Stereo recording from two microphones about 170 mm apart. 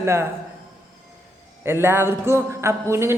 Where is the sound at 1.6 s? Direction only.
15° right (ahead or behind).